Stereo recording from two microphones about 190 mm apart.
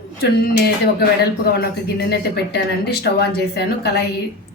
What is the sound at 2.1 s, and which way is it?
A woman's voice, 60° left (ahead or behind).